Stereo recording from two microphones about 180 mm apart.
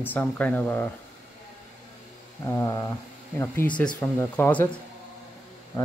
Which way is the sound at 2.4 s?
15° left (ahead or behind).